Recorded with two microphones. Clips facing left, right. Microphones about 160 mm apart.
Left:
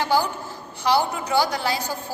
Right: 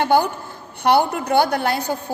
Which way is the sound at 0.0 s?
55° right (ahead or behind).